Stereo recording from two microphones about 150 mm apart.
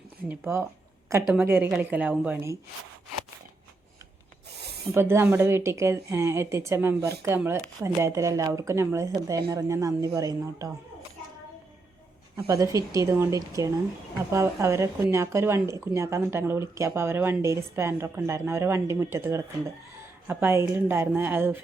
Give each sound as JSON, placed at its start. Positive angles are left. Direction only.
{"t": 0.3, "sound": "speech", "side_deg": -15}
{"t": 4.5, "sound": "spray", "side_deg": -90}
{"t": 4.9, "sound": "speech", "side_deg": -15}
{"t": 12.7, "sound": "speech", "side_deg": -20}